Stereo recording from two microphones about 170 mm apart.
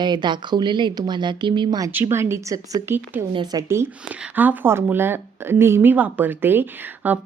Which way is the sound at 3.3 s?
25° right (ahead or behind).